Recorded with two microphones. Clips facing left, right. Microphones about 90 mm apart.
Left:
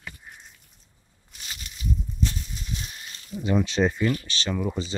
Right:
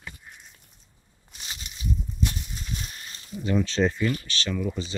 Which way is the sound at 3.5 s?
15° left (ahead or behind).